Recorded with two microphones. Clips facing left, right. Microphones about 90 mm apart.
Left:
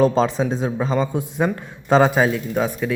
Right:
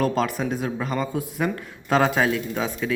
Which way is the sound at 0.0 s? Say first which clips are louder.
Left 6 dB; 25° left (ahead or behind).